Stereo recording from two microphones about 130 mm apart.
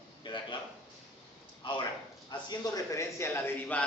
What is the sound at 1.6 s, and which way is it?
A man's voice, 40° left (ahead or behind).